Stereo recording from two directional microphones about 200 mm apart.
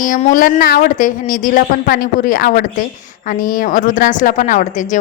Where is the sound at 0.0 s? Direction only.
40° left (ahead or behind).